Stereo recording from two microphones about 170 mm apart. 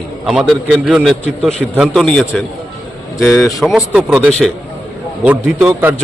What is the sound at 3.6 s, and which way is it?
Speech, 5° right (ahead or behind).